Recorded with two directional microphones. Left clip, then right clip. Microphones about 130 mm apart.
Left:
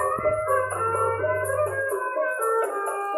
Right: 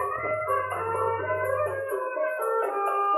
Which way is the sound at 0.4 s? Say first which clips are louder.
Left 3 dB; 55° right (ahead or behind).